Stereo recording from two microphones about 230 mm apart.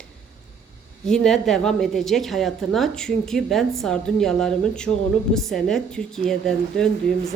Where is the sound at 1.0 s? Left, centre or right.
Centre.